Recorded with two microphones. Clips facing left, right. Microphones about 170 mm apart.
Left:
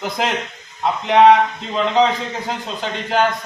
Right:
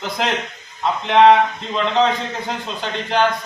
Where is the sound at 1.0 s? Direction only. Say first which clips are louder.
Left 1 dB; centre (ahead or behind).